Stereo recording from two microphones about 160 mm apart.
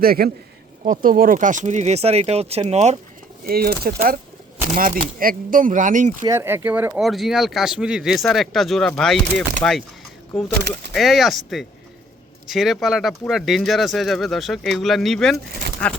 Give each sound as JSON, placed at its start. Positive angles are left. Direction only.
{"t": 0.0, "sound": "speech", "side_deg": -70}
{"t": 3.4, "sound": "speech", "side_deg": -70}
{"t": 6.2, "sound": "speech", "side_deg": -15}
{"t": 9.6, "sound": "speech", "side_deg": 15}
{"t": 10.3, "sound": "speech", "side_deg": 5}